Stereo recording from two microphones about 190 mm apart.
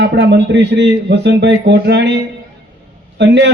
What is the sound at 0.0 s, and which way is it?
A man's voice, 65° right (ahead or behind).